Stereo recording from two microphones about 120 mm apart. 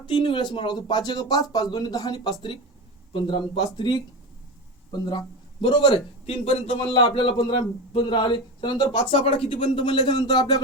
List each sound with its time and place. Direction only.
0.0 s a man's voice: 40° left (ahead or behind)
9.0 s a man's voice: 50° left (ahead or behind); by 10.6 s 35° left (ahead or behind)